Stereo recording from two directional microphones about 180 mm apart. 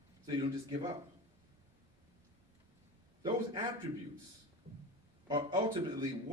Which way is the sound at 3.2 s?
25° right (ahead or behind).